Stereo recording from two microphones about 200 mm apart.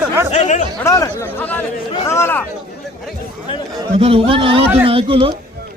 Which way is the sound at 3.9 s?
30° right (ahead or behind).